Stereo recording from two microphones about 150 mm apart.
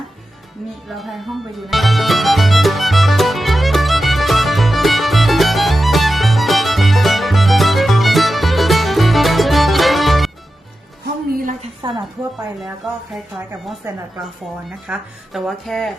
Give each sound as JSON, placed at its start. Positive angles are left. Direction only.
{"t": 0.9, "sound": "music", "side_deg": 0}
{"t": 11.0, "sound": "music", "side_deg": -75}
{"t": 11.8, "sound": "a woman's voice", "side_deg": -30}
{"t": 13.8, "sound": "a woman's voice", "side_deg": -15}
{"t": 14.8, "sound": "speech", "side_deg": 0}